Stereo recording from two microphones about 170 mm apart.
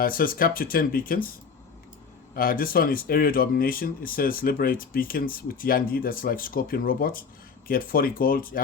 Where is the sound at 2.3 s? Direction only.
55° left (ahead or behind).